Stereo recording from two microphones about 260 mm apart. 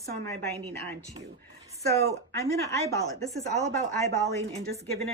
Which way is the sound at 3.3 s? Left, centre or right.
Right.